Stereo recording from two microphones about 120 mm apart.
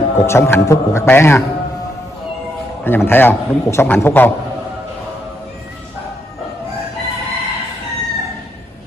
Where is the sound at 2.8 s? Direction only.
15° left (ahead or behind).